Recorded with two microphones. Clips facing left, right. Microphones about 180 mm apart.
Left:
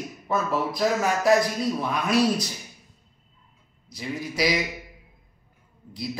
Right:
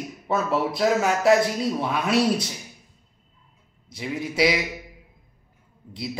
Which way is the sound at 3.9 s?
25° right (ahead or behind).